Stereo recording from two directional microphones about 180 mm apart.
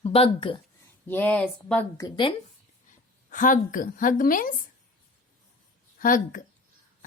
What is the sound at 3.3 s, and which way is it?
A woman's voice, 45° left (ahead or behind).